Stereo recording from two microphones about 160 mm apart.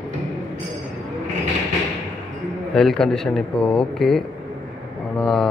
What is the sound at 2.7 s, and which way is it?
A man's voice, 5° left (ahead or behind).